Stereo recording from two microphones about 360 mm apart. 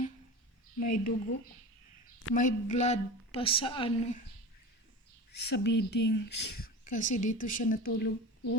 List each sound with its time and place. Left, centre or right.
0.8 s speech: left
2.3 s a woman's voice: left
5.3 s speech: left